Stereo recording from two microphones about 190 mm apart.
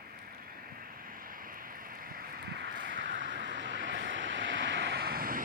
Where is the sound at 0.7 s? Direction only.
50° right (ahead or behind).